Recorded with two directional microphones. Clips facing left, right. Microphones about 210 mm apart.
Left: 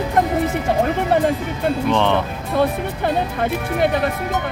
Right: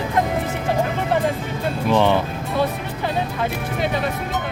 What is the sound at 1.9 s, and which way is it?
Speech, 5° right (ahead or behind).